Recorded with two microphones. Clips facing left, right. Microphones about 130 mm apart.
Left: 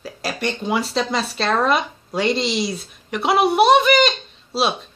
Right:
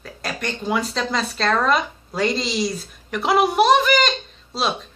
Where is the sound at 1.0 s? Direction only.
5° left (ahead or behind).